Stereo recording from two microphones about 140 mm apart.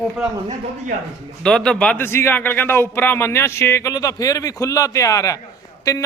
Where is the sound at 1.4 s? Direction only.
5° left (ahead or behind).